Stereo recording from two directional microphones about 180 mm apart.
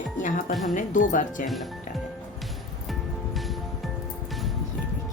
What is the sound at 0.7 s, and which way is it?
Speech, 45° left (ahead or behind).